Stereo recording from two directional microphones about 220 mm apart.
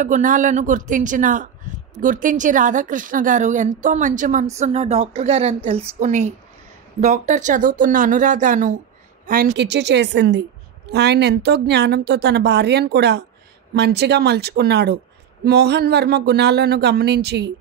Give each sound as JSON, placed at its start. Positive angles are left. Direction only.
{"t": 0.0, "sound": "a woman's voice", "side_deg": -35}